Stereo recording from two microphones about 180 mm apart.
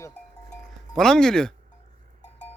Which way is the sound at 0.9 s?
5° left (ahead or behind).